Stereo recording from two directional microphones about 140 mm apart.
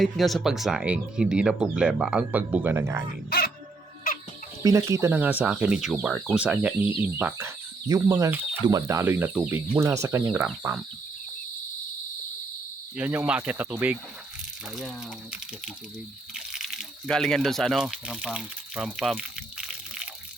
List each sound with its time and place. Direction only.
0.0 s speech: centre (ahead or behind); by 3.0 s 20° right (ahead or behind)
3.2 s music: 90° left
4.6 s speech: 20° right (ahead or behind)
13.0 s speech: 10° right (ahead or behind)
16.3 s a sound: 5° right (ahead or behind)